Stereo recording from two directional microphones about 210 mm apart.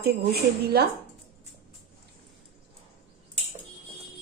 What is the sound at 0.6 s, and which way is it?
Speech, 50° right (ahead or behind).